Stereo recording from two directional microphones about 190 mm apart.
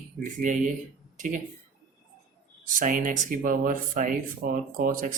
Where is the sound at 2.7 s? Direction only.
45° right (ahead or behind).